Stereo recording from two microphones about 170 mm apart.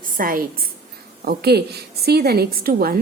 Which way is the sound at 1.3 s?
70° right (ahead or behind).